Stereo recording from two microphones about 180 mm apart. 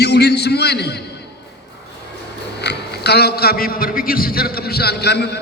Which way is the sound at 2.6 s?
65° left (ahead or behind).